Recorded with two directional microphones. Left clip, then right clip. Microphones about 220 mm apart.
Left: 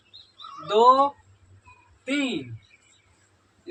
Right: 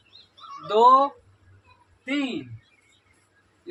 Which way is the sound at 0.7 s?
15° right (ahead or behind).